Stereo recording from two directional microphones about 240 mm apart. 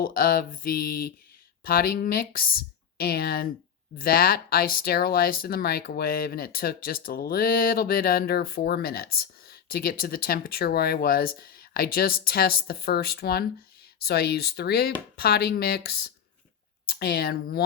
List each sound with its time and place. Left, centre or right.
0.0 s speech: left